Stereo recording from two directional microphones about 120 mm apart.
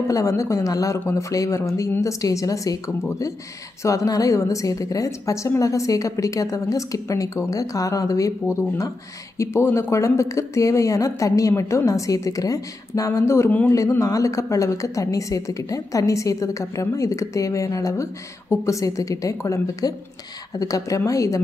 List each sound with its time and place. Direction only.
0.1 s a woman's voice: 25° left (ahead or behind)